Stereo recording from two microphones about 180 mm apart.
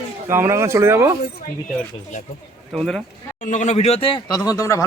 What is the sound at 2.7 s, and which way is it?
Speech, 5° left (ahead or behind).